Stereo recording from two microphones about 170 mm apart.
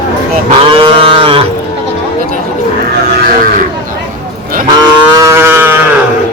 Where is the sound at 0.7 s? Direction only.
30° right (ahead or behind).